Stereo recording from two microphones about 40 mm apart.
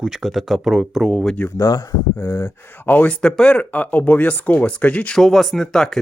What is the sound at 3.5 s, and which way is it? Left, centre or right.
Speech, left.